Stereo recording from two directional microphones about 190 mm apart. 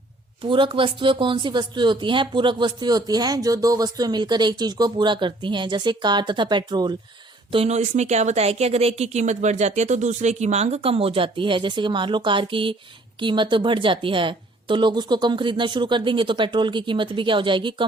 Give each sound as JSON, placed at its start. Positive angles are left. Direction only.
{"t": 0.4, "sound": "speech", "side_deg": -25}
{"t": 7.5, "sound": "speech", "side_deg": -35}